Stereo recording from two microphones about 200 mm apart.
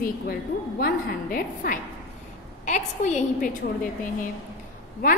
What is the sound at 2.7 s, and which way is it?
Speech, 35° left (ahead or behind).